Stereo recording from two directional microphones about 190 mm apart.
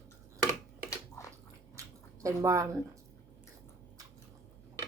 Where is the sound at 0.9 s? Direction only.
15° left (ahead or behind).